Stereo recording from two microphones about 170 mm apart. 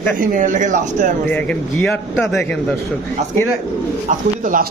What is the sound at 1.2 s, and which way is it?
A man's voice, 10° left (ahead or behind).